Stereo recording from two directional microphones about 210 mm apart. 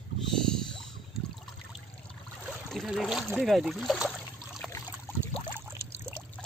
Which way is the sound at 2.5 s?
Centre (ahead or behind).